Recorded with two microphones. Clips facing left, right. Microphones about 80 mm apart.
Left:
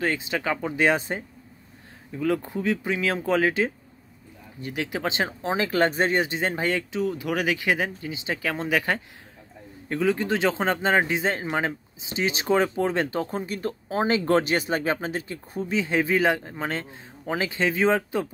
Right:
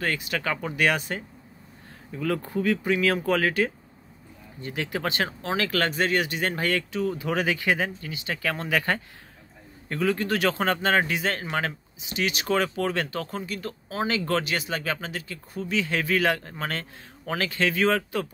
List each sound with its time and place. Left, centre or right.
0.0 s speech: centre
0.7 s speech: left
2.1 s speech: centre
7.1 s speech: centre